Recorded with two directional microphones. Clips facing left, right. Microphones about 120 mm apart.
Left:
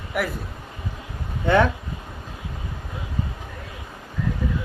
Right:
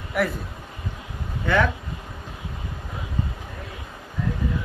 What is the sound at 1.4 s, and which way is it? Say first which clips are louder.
Speech: left 3 dB; 25° left (ahead or behind).